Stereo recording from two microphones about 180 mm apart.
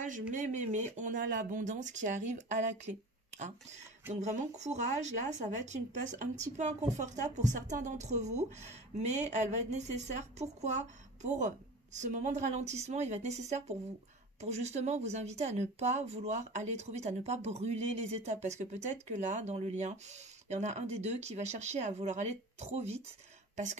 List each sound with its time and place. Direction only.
0.3 s speech: 45° right (ahead or behind)